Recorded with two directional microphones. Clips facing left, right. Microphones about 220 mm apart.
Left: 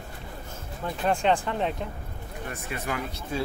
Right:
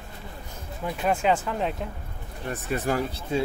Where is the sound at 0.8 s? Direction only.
5° right (ahead or behind).